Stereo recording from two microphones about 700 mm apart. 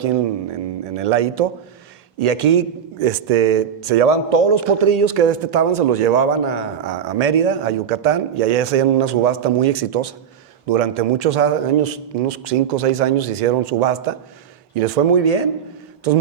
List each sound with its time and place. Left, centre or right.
0.9 s a man's voice: right